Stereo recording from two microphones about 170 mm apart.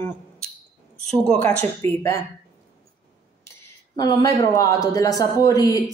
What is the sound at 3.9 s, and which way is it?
A woman's voice, 20° left (ahead or behind).